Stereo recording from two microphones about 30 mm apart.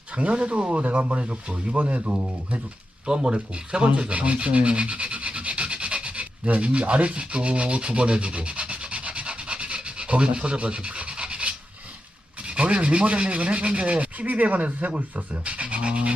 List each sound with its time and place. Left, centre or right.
0.1 s speech: right
0.3 s speech: right
1.5 s speech: right
1.7 s rub: right
3.1 s speech: right
4.1 s rub: right
6.1 s rub: right
15.1 s rub: right